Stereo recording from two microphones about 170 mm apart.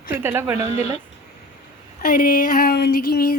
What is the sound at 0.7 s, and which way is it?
Speech, 40° left (ahead or behind).